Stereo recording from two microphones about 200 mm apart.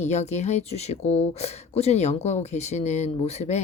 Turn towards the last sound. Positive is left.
turn(degrees=35)  # may be behind; listen again after turning